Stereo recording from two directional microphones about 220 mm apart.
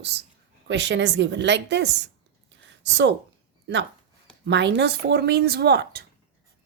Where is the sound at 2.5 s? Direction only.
55° right (ahead or behind).